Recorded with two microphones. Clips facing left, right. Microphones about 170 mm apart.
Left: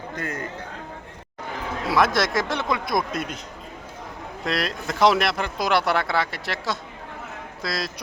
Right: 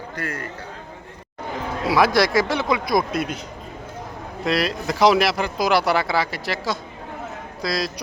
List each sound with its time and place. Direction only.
0.2 s a man's voice: 20° left (ahead or behind)
1.9 s speech: centre (ahead or behind)
4.4 s speech: centre (ahead or behind)